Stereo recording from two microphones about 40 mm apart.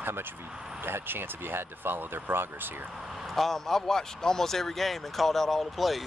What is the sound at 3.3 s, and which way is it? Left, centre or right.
Speech, centre.